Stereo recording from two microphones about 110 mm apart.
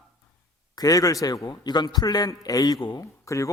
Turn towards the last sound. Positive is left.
turn(degrees=30)  # may be behind; listen again after turning